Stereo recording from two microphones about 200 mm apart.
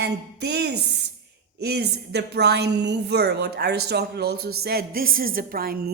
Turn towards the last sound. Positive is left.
turn(degrees=-45)  # may be behind; listen again after turning